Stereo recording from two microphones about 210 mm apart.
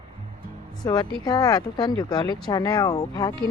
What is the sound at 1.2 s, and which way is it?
Speech, 20° left (ahead or behind).